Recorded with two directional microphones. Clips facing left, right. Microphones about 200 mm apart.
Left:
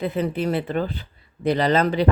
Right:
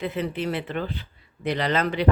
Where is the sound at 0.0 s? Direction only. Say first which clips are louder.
Left 4 dB; 40° left (ahead or behind).